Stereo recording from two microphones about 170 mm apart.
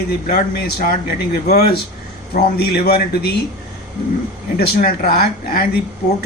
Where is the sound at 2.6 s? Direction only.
65° left (ahead or behind).